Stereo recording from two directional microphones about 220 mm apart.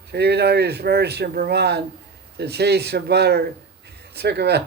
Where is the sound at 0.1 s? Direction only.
50° right (ahead or behind).